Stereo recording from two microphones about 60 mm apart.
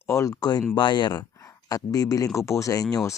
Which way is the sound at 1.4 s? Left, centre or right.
Left.